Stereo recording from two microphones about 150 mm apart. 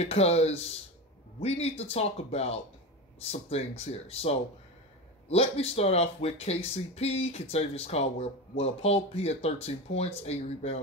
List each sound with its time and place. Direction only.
0.0 s speech: 45° left (ahead or behind)